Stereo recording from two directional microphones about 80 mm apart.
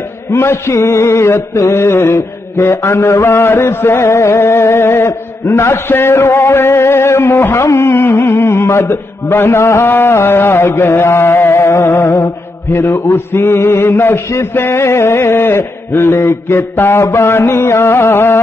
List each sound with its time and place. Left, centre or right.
0.3 s mantra: left